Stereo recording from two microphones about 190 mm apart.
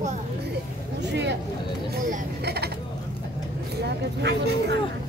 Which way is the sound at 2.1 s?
55° right (ahead or behind).